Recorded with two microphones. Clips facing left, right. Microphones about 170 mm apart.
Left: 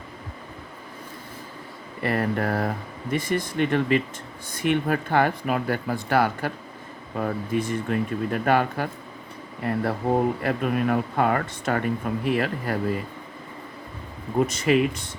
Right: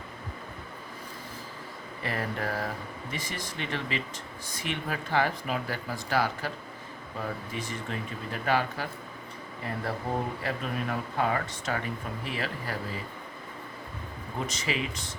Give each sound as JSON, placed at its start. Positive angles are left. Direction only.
{"t": 2.0, "sound": "speech", "side_deg": 60}
{"t": 10.4, "sound": "speech", "side_deg": 60}
{"t": 14.3, "sound": "speech", "side_deg": 55}